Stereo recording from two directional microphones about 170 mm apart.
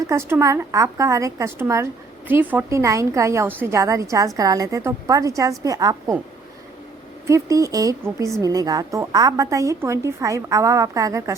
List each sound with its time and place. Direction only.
0.0 s a woman's voice: 15° right (ahead or behind)
7.3 s a woman's voice: 20° right (ahead or behind)